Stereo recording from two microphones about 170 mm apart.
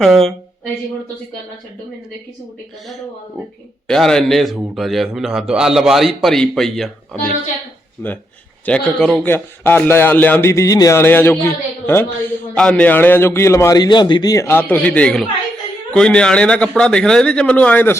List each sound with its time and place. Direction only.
0.0 s a man's voice: centre (ahead or behind)
3.8 s a man's voice: 5° left (ahead or behind)
8.6 s a man's voice: 5° left (ahead or behind)